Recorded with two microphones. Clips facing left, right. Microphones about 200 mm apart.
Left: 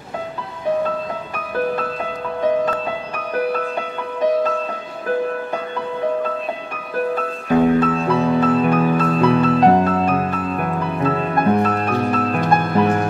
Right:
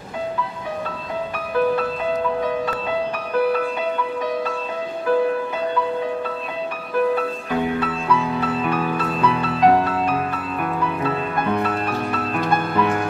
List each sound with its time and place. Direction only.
7.6 s music: 45° left (ahead or behind)